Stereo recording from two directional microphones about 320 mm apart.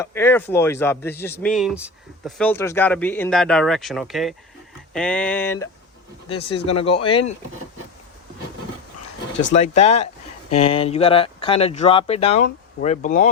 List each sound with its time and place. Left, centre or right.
0.0 s speech: centre
9.6 s speech: centre